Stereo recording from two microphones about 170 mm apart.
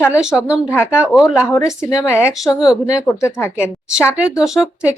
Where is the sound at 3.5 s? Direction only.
5° right (ahead or behind).